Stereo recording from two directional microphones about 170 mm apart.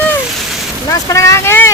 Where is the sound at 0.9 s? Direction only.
20° left (ahead or behind).